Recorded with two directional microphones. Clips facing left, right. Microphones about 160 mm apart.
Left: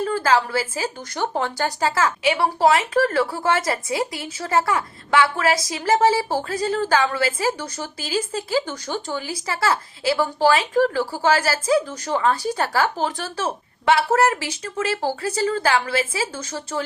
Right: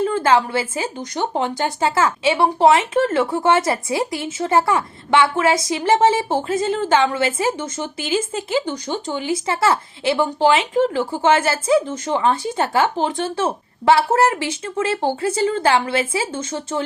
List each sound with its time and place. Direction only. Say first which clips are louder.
0.1 s a woman's voice: right 3 dB; 25° right (ahead or behind)